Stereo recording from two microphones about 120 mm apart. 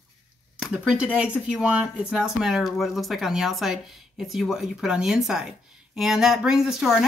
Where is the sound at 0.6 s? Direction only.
10° right (ahead or behind).